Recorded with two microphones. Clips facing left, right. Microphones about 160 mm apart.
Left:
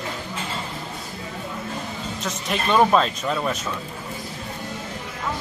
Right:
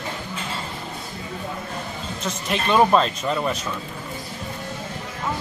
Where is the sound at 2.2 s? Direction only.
Centre (ahead or behind).